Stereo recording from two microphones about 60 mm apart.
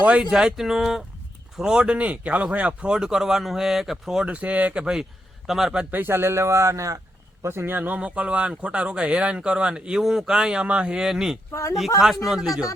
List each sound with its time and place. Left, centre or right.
0.2 s speech: centre
2.0 s speech: right
2.9 s speech: centre
4.3 s speech: right; by 5.8 s centre
5.9 s speech: right
7.4 s speech: right; by 11.3 s centre
11.5 s speech: left
11.9 s speech: centre